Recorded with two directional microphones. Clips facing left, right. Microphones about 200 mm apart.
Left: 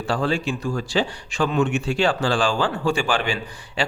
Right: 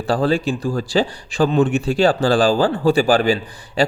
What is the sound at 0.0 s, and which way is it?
Speech, 35° right (ahead or behind).